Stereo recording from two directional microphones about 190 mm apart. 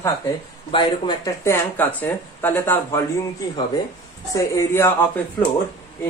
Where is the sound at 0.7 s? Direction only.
25° left (ahead or behind).